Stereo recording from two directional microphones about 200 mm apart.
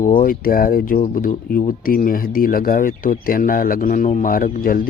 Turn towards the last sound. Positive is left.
turn(degrees=45)  # may be behind; listen again after turning